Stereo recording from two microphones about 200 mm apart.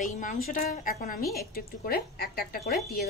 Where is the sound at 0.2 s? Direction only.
40° left (ahead or behind).